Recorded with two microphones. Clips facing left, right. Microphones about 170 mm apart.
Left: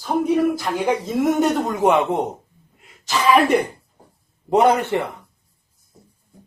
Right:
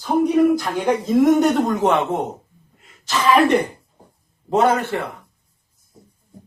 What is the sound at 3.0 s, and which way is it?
A man's voice, 10° left (ahead or behind).